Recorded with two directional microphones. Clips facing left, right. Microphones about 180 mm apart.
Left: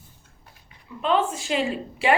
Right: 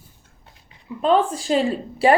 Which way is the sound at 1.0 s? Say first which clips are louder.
Right 4 dB; 40° right (ahead or behind).